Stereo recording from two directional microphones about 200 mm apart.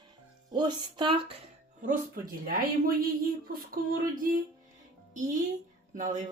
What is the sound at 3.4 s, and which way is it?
Speech, 45° right (ahead or behind).